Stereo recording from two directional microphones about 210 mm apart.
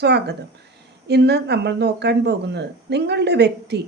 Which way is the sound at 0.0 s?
55° right (ahead or behind).